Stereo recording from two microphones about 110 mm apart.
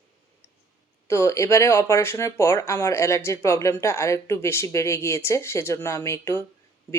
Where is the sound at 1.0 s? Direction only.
25° left (ahead or behind).